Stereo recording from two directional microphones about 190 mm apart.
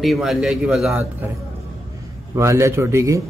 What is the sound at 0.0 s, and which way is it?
A man's voice, centre (ahead or behind).